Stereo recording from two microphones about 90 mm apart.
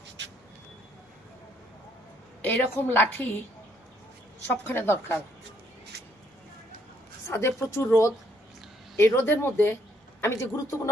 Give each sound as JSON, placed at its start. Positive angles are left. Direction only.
{"t": 2.4, "sound": "a woman's voice", "side_deg": 20}
{"t": 4.4, "sound": "a woman's voice", "side_deg": 25}
{"t": 7.3, "sound": "a woman's voice", "side_deg": 30}